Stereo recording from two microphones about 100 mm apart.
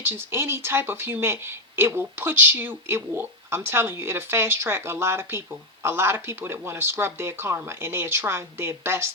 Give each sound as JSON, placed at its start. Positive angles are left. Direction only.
{"t": 0.0, "sound": "speech", "side_deg": -25}